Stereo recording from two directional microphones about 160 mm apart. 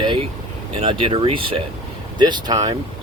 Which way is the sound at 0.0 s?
30° right (ahead or behind).